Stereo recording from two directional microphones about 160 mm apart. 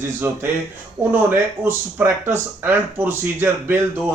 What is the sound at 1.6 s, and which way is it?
Speech, 10° right (ahead or behind).